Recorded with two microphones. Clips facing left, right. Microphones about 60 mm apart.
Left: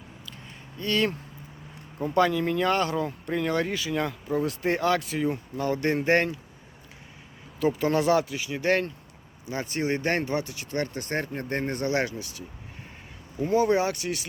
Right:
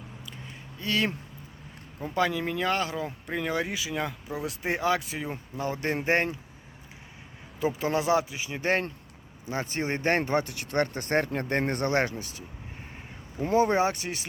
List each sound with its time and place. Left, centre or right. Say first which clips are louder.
0.8 s speech: left 2 dB; centre
7.6 s speech: left 3 dB; centre; by 12.1 s right
12.1 s speech: left 1 dB; right